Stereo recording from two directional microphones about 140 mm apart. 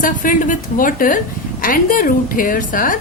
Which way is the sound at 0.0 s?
75° left (ahead or behind).